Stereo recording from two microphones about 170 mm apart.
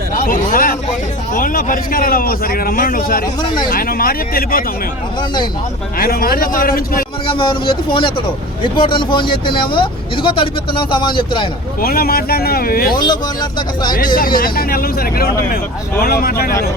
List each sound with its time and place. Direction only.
0.3 s speech: 55° left (ahead or behind)
6.0 s speech: 60° left (ahead or behind)
7.3 s a man's voice: 30° left (ahead or behind)
11.8 s speech: 60° left (ahead or behind)
12.9 s speech: 25° left (ahead or behind)
14.2 s speech: 60° left (ahead or behind)